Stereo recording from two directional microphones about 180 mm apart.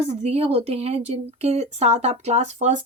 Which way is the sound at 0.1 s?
35° right (ahead or behind).